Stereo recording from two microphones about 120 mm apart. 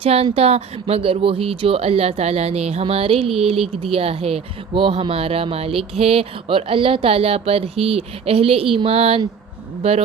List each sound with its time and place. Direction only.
0.0 s speech: 55° right (ahead or behind)